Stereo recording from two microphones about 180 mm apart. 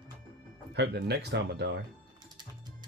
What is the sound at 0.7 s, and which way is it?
Speech, 75° right (ahead or behind).